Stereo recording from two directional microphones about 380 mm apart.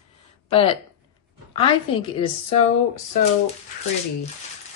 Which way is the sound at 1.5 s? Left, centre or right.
Centre.